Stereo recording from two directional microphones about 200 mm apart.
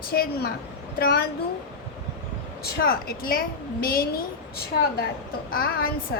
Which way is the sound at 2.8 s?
50° left (ahead or behind).